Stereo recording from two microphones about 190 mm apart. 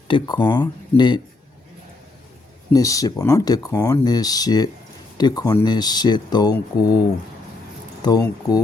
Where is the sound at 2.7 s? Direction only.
15° left (ahead or behind).